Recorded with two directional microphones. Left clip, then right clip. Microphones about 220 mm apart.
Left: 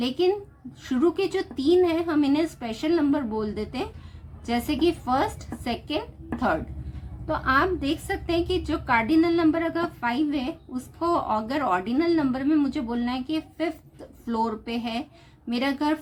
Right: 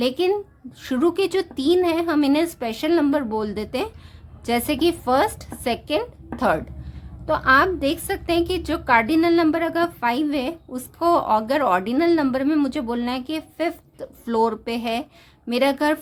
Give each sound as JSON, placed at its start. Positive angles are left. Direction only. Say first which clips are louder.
{"t": 0.0, "sound": "a woman's voice", "louder": "right 3 dB", "side_deg": -50}